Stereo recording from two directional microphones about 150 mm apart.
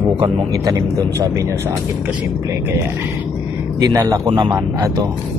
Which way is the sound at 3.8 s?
20° right (ahead or behind).